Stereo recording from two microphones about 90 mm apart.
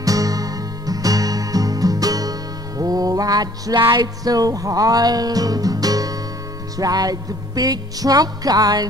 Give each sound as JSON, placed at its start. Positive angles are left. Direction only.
{"t": 0.0, "sound": "music", "side_deg": -40}